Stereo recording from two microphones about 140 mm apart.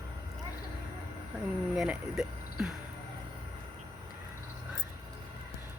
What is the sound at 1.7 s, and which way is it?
Speech, 5° right (ahead or behind).